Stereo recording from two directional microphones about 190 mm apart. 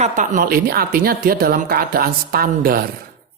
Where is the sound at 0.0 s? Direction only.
45° right (ahead or behind).